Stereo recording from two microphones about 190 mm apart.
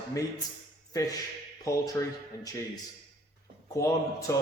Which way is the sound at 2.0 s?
20° left (ahead or behind).